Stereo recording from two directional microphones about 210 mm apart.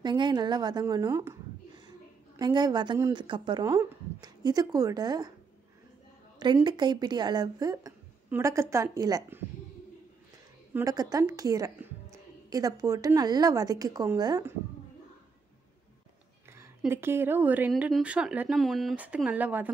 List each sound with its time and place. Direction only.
0.0 s a woman's voice: 20° right (ahead or behind)
6.4 s speech: 20° right (ahead or behind)
10.7 s a woman's voice: 15° right (ahead or behind)
16.4 s speech: 10° right (ahead or behind)